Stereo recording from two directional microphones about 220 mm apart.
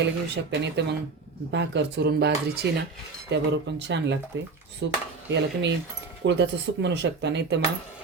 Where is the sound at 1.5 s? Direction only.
50° right (ahead or behind).